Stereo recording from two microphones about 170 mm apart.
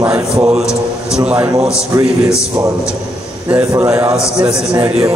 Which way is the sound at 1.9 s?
20° right (ahead or behind).